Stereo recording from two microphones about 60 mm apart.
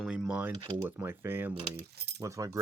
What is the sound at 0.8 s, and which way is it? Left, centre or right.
Speech, right.